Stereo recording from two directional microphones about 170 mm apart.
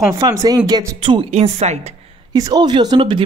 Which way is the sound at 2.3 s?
25° right (ahead or behind).